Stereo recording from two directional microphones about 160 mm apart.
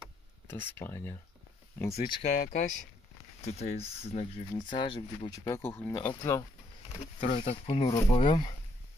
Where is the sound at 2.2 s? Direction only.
50° left (ahead or behind).